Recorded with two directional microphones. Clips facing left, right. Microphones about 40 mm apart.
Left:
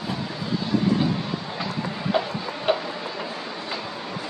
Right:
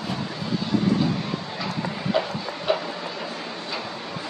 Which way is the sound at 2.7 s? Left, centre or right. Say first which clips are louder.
Left 1 dB; left.